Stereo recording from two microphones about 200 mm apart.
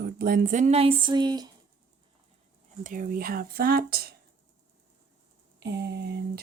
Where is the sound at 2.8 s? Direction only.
45° right (ahead or behind).